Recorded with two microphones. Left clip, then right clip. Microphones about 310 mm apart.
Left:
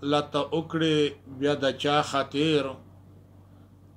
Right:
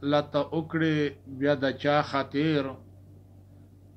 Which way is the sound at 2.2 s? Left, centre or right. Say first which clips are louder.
Left 2 dB; left.